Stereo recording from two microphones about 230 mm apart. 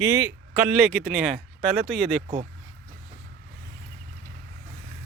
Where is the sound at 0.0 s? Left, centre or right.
Centre.